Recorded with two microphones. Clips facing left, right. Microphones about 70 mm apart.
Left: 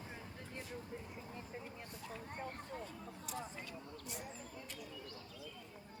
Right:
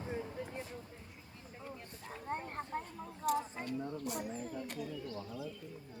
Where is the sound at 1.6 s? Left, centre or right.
Right.